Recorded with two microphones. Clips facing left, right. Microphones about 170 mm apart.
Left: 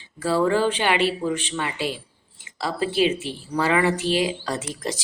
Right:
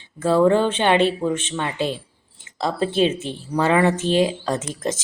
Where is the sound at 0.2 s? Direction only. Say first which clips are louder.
Right 4 dB; 20° right (ahead or behind).